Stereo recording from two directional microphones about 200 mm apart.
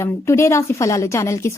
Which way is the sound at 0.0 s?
15° left (ahead or behind).